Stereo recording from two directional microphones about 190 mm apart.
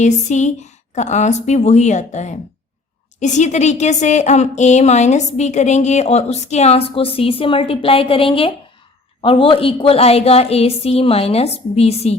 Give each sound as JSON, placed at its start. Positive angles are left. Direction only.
{"t": 0.0, "sound": "a woman's voice", "side_deg": 40}